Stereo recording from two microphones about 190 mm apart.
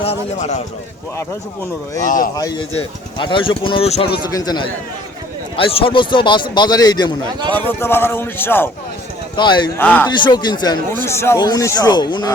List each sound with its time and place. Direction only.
0.0 s a man's voice: 35° left (ahead or behind)
2.0 s speech: 45° left (ahead or behind)
2.3 s a man's voice: 20° left (ahead or behind)
9.3 s speech: 25° left (ahead or behind)
9.7 s a man's voice: 10° left (ahead or behind)
10.1 s speech: 25° left (ahead or behind)